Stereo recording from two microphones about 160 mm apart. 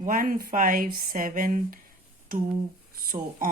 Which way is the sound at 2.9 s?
65° right (ahead or behind).